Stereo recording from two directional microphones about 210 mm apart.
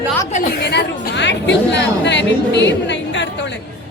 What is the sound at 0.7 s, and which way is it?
A woman's voice, 55° left (ahead or behind).